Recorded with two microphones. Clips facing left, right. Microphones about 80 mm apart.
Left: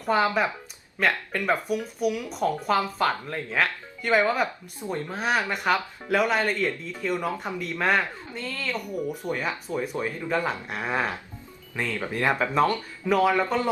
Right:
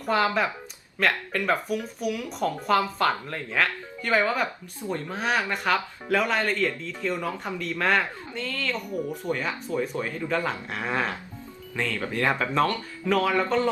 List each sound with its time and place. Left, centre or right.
0.9 s speech: centre
5.0 s speech: centre